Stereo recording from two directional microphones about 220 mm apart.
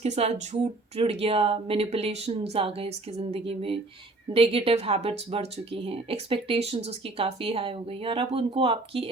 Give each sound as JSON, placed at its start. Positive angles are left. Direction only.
{"t": 0.0, "sound": "speech", "side_deg": -30}